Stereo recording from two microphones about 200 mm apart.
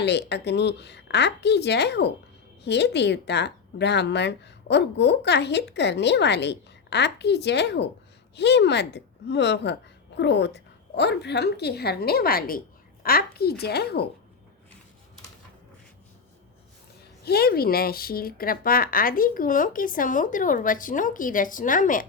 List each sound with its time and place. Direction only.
0.0 s speech: 60° left (ahead or behind)
17.2 s speech: 50° left (ahead or behind)